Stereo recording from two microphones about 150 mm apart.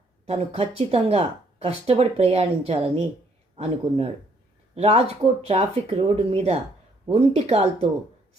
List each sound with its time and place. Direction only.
0.3 s a woman's voice: 40° right (ahead or behind)